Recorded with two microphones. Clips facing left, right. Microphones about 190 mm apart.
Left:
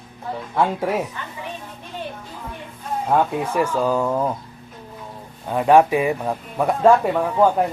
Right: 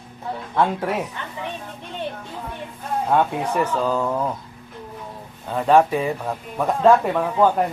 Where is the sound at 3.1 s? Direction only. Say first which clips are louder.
Left 1 dB; 5° left (ahead or behind).